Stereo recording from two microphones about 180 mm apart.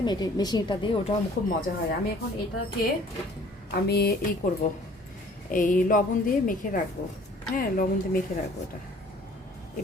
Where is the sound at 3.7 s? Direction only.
65° left (ahead or behind).